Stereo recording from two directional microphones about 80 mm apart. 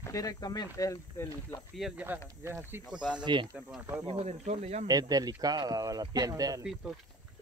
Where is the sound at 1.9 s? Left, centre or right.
Right.